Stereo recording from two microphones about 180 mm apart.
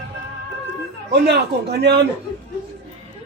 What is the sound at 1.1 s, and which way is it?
Speech, 65° right (ahead or behind).